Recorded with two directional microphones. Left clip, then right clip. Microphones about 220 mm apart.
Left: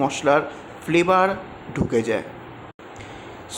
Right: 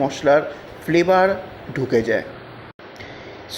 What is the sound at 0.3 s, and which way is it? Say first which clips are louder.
Speech: right 4 dB; centre (ahead or behind).